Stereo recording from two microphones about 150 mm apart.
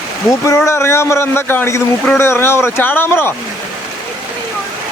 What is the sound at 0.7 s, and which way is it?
A man's voice, 15° left (ahead or behind).